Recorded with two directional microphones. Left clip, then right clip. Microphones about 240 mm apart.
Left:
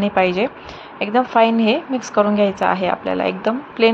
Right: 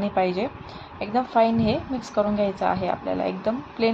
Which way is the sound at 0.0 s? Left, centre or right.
Centre.